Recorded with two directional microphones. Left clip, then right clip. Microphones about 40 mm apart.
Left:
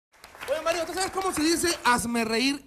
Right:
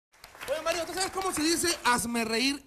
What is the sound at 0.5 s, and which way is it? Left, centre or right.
A man's voice, left.